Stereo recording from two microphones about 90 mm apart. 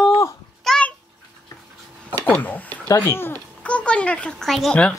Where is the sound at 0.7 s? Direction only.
10° left (ahead or behind).